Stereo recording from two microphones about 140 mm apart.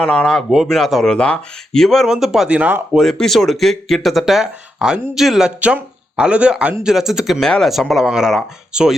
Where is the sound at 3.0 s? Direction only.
Centre (ahead or behind).